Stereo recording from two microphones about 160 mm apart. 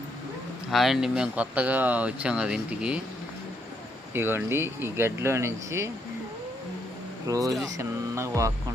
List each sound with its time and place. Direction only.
0.7 s speech: centre (ahead or behind)
4.1 s speech: 15° right (ahead or behind)
7.3 s a sound: 20° right (ahead or behind)